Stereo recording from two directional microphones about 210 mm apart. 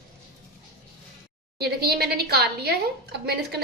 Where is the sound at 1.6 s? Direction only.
50° right (ahead or behind).